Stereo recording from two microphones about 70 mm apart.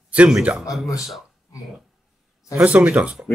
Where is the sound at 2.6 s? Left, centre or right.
Centre.